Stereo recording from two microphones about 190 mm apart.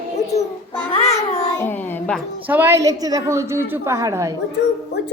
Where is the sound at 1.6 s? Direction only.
10° left (ahead or behind).